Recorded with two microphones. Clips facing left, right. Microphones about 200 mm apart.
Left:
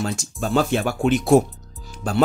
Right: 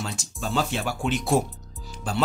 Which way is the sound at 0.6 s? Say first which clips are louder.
Left 7 dB; 55° left (ahead or behind).